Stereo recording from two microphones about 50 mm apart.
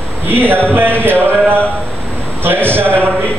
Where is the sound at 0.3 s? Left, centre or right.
Right.